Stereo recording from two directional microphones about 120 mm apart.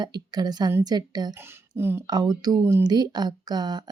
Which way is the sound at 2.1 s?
35° right (ahead or behind).